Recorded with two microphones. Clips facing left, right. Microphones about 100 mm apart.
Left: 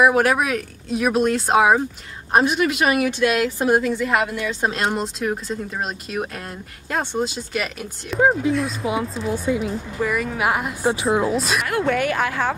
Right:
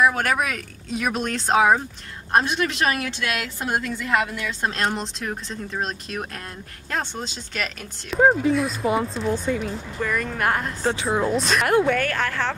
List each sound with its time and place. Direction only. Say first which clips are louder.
0.0 s speech: left 4 dB; 5° left (ahead or behind)